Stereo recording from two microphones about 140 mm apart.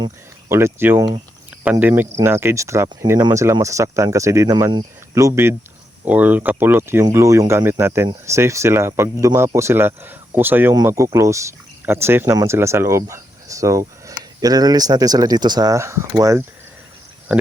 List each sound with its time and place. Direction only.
0.4 s speech: 20° right (ahead or behind)